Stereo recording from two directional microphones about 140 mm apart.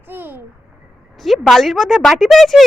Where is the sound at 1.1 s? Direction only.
Centre (ahead or behind).